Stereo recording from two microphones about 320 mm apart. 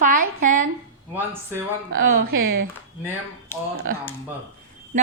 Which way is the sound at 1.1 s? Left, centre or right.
Centre.